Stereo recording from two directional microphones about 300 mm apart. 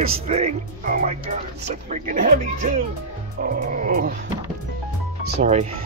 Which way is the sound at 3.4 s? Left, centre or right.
Right.